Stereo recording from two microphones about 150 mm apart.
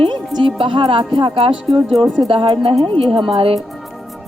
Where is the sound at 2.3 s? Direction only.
35° right (ahead or behind).